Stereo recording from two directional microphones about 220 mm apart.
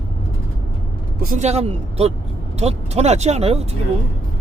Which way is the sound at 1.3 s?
30° right (ahead or behind).